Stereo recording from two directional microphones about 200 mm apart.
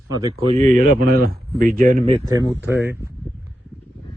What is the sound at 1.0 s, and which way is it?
Speech, 50° right (ahead or behind).